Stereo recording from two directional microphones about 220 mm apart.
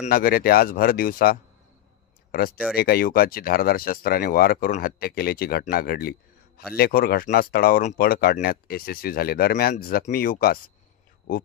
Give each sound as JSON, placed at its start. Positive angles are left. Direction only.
{"t": 0.0, "sound": "speech", "side_deg": 45}